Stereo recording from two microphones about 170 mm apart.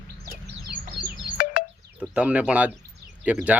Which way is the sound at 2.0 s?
5° right (ahead or behind).